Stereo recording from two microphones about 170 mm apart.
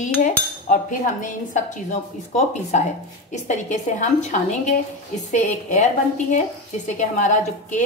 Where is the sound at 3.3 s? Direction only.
45° left (ahead or behind).